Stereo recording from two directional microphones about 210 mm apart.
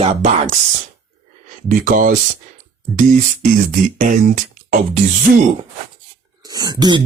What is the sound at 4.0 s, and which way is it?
Speech, 40° right (ahead or behind).